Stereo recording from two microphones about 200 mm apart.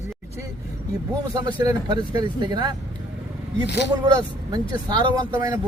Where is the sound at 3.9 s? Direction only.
20° right (ahead or behind).